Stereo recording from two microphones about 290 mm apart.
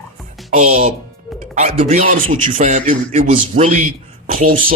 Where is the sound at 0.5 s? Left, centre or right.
Right.